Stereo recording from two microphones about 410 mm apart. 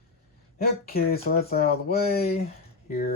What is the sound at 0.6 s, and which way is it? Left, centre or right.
Speech, left.